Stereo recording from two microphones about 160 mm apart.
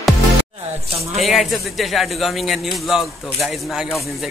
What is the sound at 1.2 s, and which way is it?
A man's voice, centre (ahead or behind).